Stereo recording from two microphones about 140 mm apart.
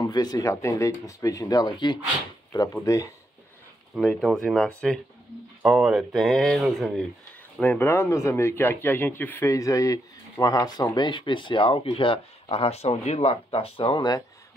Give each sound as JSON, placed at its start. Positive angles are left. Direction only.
{"t": 0.0, "sound": "speech", "side_deg": 30}
{"t": 3.9, "sound": "speech", "side_deg": 5}
{"t": 7.6, "sound": "speech", "side_deg": 15}